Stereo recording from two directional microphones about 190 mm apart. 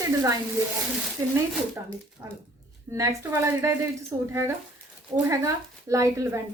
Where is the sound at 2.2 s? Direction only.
10° right (ahead or behind).